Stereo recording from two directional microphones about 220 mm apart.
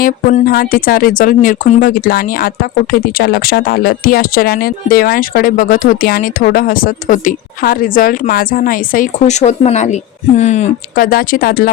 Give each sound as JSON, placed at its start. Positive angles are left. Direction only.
{"t": 0.0, "sound": "speech", "side_deg": 35}